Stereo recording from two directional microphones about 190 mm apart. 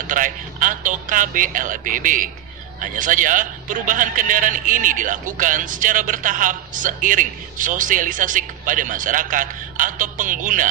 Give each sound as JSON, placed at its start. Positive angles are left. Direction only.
{"t": 0.0, "sound": "a man's voice", "side_deg": -45}